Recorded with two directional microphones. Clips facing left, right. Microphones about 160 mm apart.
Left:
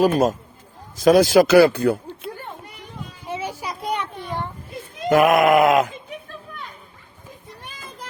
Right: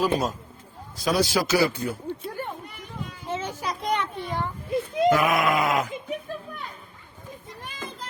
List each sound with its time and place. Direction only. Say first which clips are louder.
0.0 s speech: left 7 dB; 45° left (ahead or behind); by 2.0 s 65° left (ahead or behind)
3.2 s a sound: left 1 dB; 10° left (ahead or behind)
5.0 s speech: left 7 dB; 55° left (ahead or behind)